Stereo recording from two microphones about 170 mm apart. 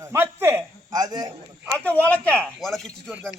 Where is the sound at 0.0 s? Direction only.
15° right (ahead or behind).